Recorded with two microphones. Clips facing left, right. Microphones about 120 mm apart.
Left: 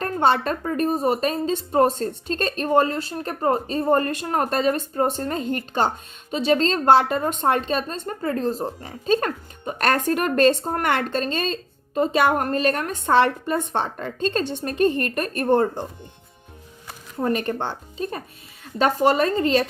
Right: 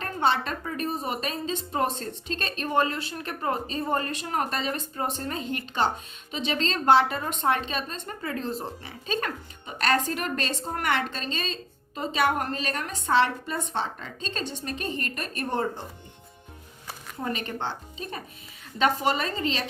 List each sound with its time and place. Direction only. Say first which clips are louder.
0.0 s a woman's voice: left 5 dB; 45° left (ahead or behind)
17.2 s a woman's voice: left 7 dB; 50° left (ahead or behind)